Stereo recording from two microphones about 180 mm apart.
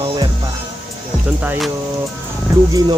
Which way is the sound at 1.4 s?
Centre (ahead or behind).